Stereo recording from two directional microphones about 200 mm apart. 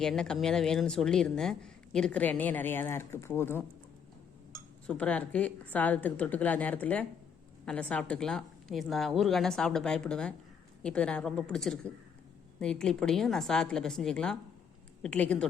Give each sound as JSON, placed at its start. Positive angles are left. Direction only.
{"t": 0.0, "sound": "a woman's voice", "side_deg": 5}
{"t": 4.9, "sound": "a woman's voice", "side_deg": 5}